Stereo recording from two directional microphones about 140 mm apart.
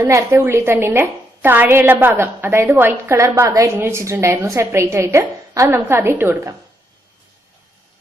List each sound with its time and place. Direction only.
0.0 s a woman's voice: 20° right (ahead or behind)